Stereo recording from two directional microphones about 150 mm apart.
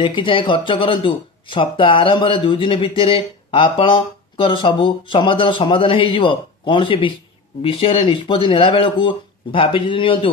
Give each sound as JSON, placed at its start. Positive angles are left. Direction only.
{"t": 0.0, "sound": "speech", "side_deg": 35}